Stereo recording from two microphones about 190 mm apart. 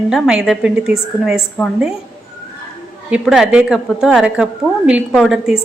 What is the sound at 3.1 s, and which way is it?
Speech, 5° right (ahead or behind).